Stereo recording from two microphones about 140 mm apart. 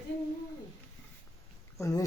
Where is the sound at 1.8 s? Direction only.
20° left (ahead or behind).